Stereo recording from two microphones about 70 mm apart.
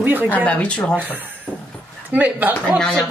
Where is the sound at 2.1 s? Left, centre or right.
Right.